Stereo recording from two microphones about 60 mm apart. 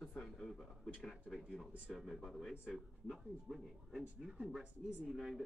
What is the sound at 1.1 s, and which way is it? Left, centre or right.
Speech, centre.